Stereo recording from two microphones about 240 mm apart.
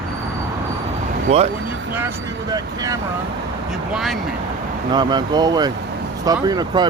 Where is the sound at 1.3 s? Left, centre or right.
Right.